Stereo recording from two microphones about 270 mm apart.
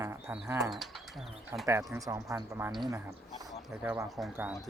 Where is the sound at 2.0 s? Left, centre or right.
Centre.